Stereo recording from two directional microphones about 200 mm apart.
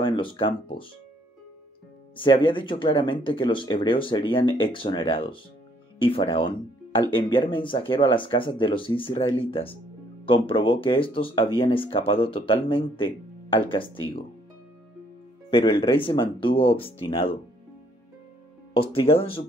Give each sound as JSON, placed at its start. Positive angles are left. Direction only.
{"t": 0.0, "sound": "speech", "side_deg": 25}
{"t": 2.1, "sound": "speech", "side_deg": 25}
{"t": 15.5, "sound": "speech", "side_deg": 25}
{"t": 18.7, "sound": "speech", "side_deg": 25}